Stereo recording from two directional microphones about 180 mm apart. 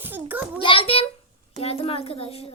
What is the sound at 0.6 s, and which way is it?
A woman's voice, 30° left (ahead or behind).